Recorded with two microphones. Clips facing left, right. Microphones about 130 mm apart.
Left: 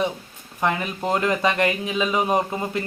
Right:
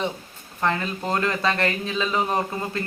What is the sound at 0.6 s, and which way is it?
Speech, 15° left (ahead or behind).